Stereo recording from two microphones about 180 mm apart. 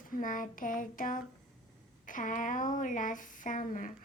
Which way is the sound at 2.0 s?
45° left (ahead or behind).